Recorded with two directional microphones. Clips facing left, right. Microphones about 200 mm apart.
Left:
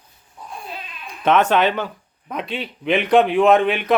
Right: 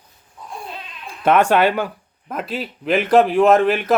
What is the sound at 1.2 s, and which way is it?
A man's voice, 10° right (ahead or behind).